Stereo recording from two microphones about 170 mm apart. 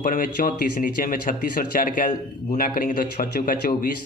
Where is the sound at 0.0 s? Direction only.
55° left (ahead or behind).